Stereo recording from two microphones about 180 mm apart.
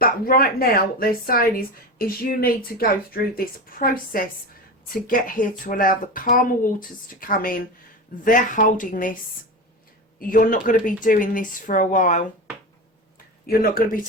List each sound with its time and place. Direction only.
0.0 s speech: 55° left (ahead or behind)
10.2 s speech: 50° left (ahead or behind)
13.5 s speech: 60° left (ahead or behind)